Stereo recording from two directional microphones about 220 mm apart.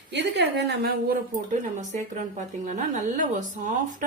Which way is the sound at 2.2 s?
35° right (ahead or behind).